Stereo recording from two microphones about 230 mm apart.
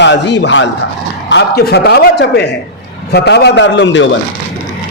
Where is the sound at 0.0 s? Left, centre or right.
Left.